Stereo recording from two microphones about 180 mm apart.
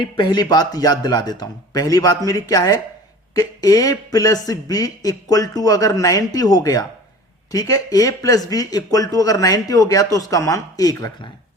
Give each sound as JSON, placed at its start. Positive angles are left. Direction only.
{"t": 0.0, "sound": "speech", "side_deg": 25}